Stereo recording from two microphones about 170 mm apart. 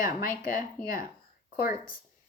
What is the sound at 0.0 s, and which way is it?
Speech, 55° left (ahead or behind).